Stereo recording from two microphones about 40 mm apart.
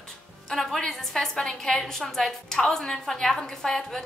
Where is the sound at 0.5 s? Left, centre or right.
Centre.